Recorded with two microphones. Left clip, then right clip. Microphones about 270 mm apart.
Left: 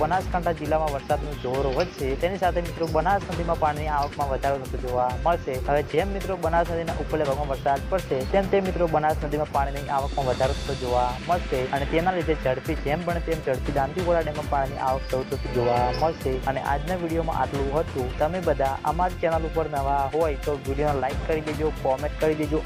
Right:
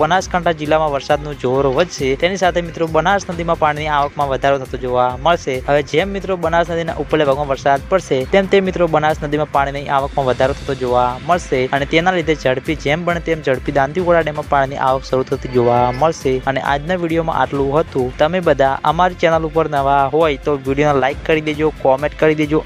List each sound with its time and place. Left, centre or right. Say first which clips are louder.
0.0 s speech: right 9 dB; right